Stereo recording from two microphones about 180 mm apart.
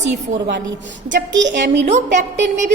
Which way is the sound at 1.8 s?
40° right (ahead or behind).